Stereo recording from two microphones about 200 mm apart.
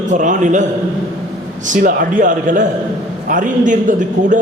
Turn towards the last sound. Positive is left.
turn(degrees=-40)  # may be behind; listen again after turning